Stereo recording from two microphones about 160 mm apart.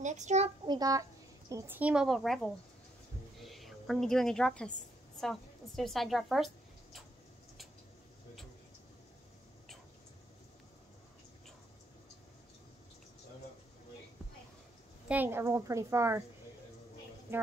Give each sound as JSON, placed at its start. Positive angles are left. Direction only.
{"t": 0.0, "sound": "a child's voice", "side_deg": -45}
{"t": 0.7, "sound": "speech", "side_deg": -20}
{"t": 1.5, "sound": "a woman's voice", "side_deg": -10}
{"t": 15.0, "sound": "a woman's voice", "side_deg": -10}
{"t": 17.3, "sound": "a woman's voice", "side_deg": -15}